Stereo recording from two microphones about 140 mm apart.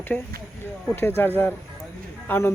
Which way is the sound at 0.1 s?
15° left (ahead or behind).